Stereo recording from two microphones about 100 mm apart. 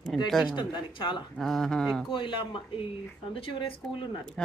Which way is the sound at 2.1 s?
55° left (ahead or behind).